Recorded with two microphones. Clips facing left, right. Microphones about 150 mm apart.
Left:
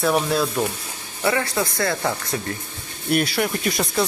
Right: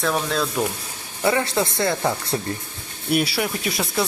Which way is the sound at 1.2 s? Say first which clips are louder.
Right 1 dB; 20° right (ahead or behind).